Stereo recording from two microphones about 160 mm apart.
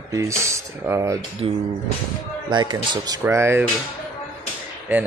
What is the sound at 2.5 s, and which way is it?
Speech, 30° right (ahead or behind).